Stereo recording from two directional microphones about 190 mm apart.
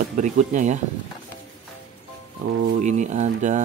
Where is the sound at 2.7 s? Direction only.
40° right (ahead or behind).